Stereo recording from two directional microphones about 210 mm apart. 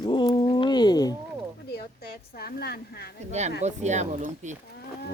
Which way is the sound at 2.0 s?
45° left (ahead or behind).